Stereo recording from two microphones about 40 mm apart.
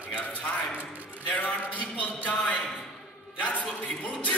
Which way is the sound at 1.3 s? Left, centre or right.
Left.